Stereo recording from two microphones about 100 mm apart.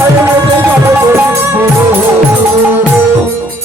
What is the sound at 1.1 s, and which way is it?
Music, 25° right (ahead or behind).